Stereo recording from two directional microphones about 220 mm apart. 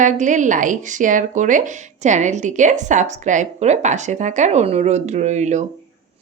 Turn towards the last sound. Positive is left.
turn(degrees=-30)  # may be behind; listen again after turning